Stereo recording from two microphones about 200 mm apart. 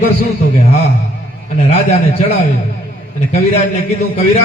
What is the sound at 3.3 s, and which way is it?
A man's voice, 30° left (ahead or behind).